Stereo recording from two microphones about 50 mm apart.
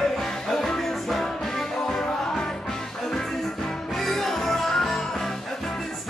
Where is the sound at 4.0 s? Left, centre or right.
Centre.